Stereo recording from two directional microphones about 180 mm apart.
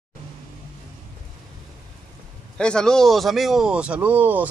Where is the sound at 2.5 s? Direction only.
5° left (ahead or behind).